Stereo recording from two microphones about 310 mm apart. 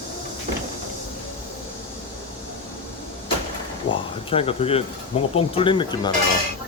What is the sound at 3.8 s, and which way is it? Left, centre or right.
Speech, centre.